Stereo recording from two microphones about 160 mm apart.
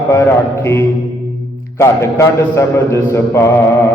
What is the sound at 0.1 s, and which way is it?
Mantra, 15° left (ahead or behind).